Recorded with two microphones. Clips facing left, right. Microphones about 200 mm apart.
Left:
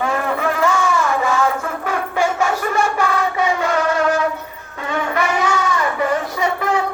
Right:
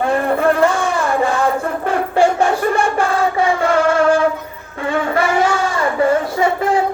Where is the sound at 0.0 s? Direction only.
35° right (ahead or behind).